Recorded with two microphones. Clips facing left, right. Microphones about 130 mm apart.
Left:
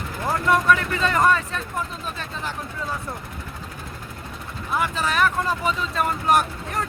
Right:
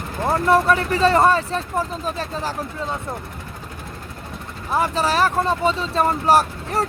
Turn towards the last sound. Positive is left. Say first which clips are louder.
# right 4 dB
turn(degrees=-35)  # may be behind; listen again after turning